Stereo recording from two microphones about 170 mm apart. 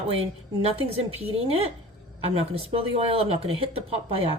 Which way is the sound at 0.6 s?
35° right (ahead or behind).